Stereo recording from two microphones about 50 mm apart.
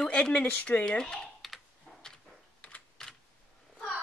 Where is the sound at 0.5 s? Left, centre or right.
Left.